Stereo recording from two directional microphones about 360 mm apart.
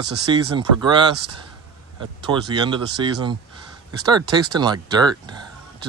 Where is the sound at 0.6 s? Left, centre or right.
Centre.